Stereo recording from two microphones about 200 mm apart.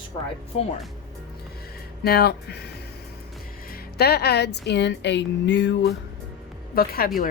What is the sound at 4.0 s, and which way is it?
Speech, 55° left (ahead or behind).